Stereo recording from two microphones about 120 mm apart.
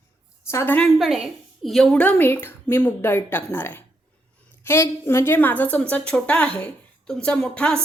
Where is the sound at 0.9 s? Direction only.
5° right (ahead or behind).